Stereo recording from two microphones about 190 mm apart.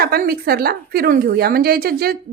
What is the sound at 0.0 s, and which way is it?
A woman's voice, 55° right (ahead or behind).